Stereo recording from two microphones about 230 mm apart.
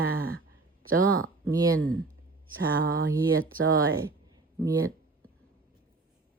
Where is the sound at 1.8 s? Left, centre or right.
Centre.